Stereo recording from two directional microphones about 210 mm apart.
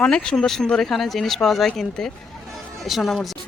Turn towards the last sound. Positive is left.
turn(degrees=0)  # may be behind; listen again after turning